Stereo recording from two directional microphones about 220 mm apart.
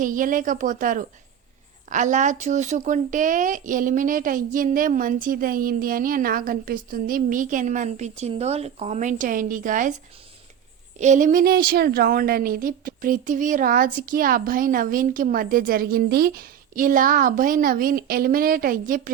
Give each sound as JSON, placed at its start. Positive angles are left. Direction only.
{"t": 0.0, "sound": "a woman's voice", "side_deg": -35}
{"t": 10.9, "sound": "a woman's voice", "side_deg": -35}